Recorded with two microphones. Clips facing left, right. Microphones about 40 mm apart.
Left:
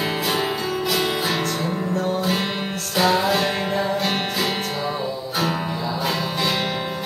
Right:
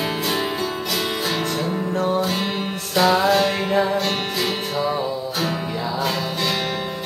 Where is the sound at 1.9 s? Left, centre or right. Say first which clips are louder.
Right 3 dB; right.